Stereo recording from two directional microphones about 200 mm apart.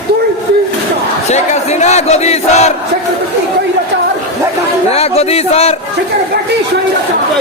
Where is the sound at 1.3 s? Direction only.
35° left (ahead or behind).